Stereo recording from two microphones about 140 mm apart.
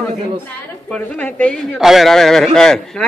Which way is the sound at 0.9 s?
10° left (ahead or behind).